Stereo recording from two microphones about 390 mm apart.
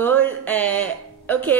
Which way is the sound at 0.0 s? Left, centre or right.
Centre.